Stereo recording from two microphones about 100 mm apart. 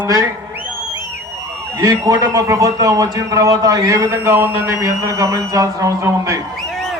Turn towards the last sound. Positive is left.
turn(degrees=0)  # may be behind; listen again after turning